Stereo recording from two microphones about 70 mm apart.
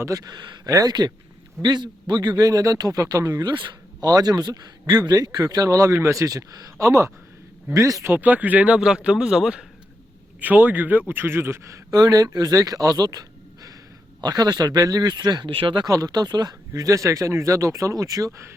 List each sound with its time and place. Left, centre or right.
0.0 s speech: right
0.6 s speech: right
1.6 s speech: right
2.4 s speech: right
3.0 s speech: right
3.4 s speech: right
5.6 s speech: right
8.0 s a man's voice: right
10.4 s speech: right
15.9 s speech: right